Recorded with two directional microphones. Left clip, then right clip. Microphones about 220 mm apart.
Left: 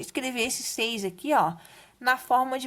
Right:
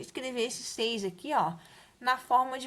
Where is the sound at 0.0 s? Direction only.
40° left (ahead or behind).